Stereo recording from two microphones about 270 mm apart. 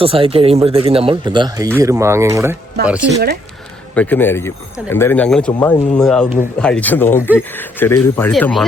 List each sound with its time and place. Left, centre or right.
0.0 s speech: right; by 3.2 s centre
3.9 s speech: centre